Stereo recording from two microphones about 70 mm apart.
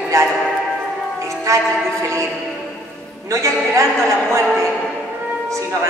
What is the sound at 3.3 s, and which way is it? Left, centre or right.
Speech, right.